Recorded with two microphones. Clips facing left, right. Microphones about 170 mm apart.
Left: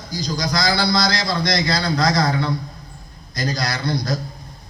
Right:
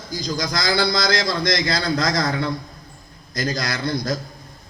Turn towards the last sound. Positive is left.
turn(degrees=-50)  # may be behind; listen again after turning